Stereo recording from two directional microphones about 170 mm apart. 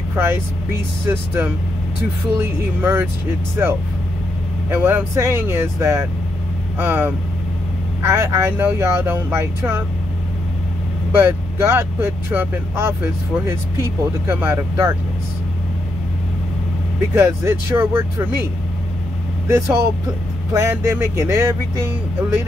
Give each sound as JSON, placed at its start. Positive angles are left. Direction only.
{"t": 0.1, "sound": "speech", "side_deg": -15}
{"t": 11.1, "sound": "speech", "side_deg": -15}
{"t": 17.2, "sound": "speech", "side_deg": -15}
{"t": 19.4, "sound": "speech", "side_deg": -15}